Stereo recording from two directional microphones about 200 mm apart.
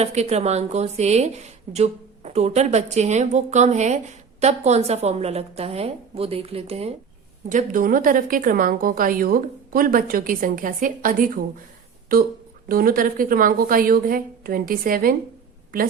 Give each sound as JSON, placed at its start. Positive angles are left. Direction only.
{"t": 0.0, "sound": "a woman's voice", "side_deg": -35}
{"t": 7.5, "sound": "a woman's voice", "side_deg": -45}
{"t": 12.6, "sound": "a woman's voice", "side_deg": -45}